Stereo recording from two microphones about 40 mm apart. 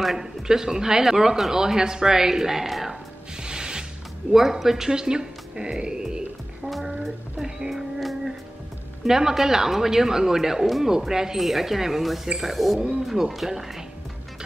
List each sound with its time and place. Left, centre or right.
0.0 s speech: centre
3.3 s music: centre
4.3 s speech: centre
6.7 s music: centre
9.0 s speech: centre